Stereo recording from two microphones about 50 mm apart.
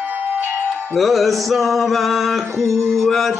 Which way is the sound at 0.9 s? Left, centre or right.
Centre.